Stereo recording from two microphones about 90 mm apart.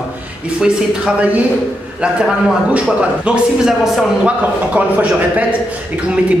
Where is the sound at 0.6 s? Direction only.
10° right (ahead or behind).